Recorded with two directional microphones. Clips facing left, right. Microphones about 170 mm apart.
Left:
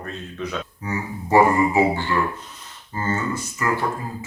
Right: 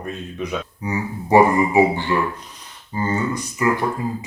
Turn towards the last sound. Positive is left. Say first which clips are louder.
# right 3 dB
turn(degrees=-15)  # may be behind; listen again after turning